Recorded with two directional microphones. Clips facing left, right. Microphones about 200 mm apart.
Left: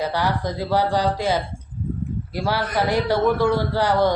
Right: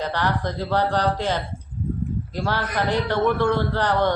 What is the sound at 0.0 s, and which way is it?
A man's voice, 10° left (ahead or behind).